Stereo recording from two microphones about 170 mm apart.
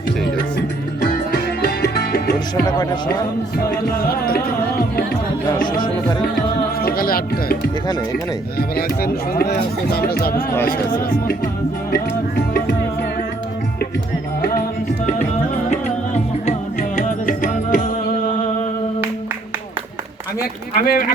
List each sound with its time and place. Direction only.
1.0 s music: 60° left (ahead or behind)
2.6 s music: 25° left (ahead or behind)
4.0 s speech: 60° left (ahead or behind)
5.7 s music: 25° left (ahead or behind)
6.8 s speech: 60° left (ahead or behind)
8.5 s speech: 60° left (ahead or behind)
10.8 s speech: 10° left (ahead or behind)
16.5 s music: 50° left (ahead or behind)
20.7 s speech: 60° left (ahead or behind)